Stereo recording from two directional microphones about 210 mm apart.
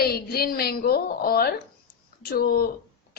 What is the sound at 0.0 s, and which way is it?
A woman's voice, 45° left (ahead or behind).